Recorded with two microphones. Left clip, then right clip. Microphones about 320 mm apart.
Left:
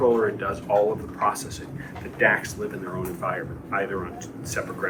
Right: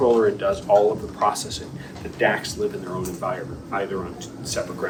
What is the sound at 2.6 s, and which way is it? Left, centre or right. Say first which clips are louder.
Speech: right 4 dB; centre.